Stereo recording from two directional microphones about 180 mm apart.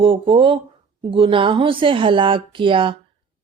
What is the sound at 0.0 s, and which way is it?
Speech, 30° right (ahead or behind).